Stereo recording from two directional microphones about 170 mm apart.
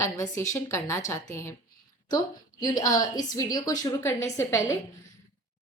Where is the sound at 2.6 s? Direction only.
20° left (ahead or behind).